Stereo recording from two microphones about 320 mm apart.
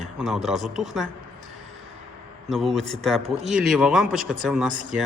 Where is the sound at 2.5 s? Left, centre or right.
Centre.